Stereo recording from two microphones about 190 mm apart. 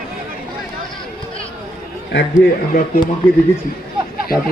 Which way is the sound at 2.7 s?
55° left (ahead or behind).